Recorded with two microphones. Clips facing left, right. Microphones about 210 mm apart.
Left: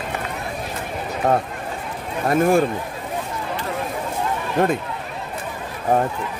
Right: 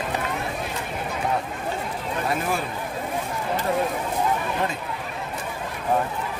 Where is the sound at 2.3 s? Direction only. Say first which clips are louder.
Left 12 dB; 50° left (ahead or behind).